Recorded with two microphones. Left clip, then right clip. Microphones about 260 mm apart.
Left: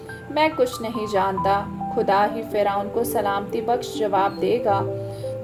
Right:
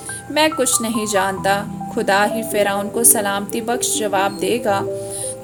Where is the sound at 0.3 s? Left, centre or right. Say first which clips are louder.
Right 3 dB; right.